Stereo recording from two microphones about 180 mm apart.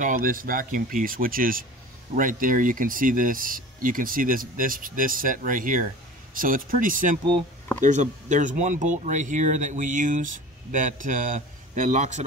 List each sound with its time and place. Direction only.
0.0 s speech: 50° right (ahead or behind)